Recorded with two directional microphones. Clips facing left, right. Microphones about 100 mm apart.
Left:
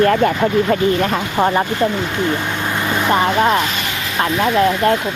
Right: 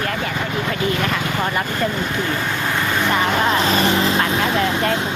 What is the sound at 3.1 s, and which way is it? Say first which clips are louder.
Speech: left 5 dB; 30° left (ahead or behind).